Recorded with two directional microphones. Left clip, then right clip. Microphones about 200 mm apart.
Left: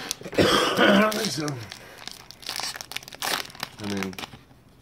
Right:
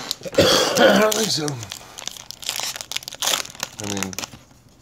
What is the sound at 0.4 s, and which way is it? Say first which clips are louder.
Throat clearing: right 5 dB; 40° right (ahead or behind).